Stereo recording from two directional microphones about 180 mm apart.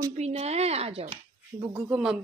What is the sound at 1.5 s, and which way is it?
Speech, 15° right (ahead or behind).